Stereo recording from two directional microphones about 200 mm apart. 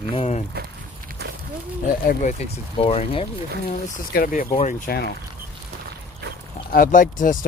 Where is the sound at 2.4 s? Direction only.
30° left (ahead or behind).